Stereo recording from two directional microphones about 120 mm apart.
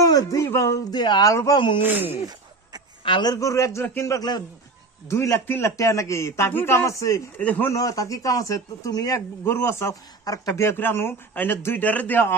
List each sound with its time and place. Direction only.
0.0 s speech: 30° left (ahead or behind)
0.9 s speech: 35° left (ahead or behind)
1.3 s a man's voice: 25° left (ahead or behind)
1.8 s speech: 15° right (ahead or behind)
3.0 s a man's voice: 40° left (ahead or behind)
7.3 s a man's voice: 15° left (ahead or behind)
7.7 s a man's voice: 30° left (ahead or behind)